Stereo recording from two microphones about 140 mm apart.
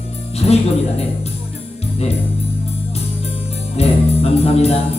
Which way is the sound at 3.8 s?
45° left (ahead or behind).